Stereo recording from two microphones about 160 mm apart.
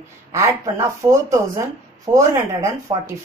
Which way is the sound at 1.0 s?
20° right (ahead or behind).